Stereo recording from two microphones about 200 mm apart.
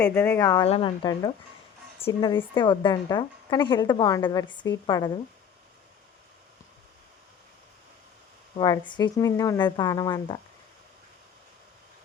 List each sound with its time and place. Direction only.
0.0 s a woman's voice: 10° left (ahead or behind)
8.5 s a woman's voice: 20° left (ahead or behind)